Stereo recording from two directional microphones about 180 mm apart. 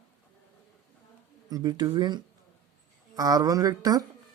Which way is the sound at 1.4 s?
20° right (ahead or behind).